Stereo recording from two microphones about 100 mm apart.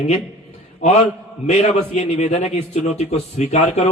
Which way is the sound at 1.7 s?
90° left.